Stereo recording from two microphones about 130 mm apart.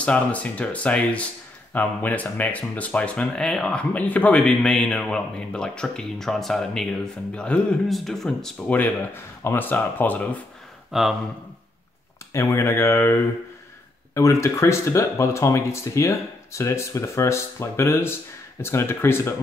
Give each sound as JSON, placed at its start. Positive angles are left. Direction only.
{"t": 0.0, "sound": "speech", "side_deg": 10}
{"t": 10.9, "sound": "speech", "side_deg": 0}
{"t": 12.3, "sound": "speech", "side_deg": 25}
{"t": 14.1, "sound": "speech", "side_deg": 20}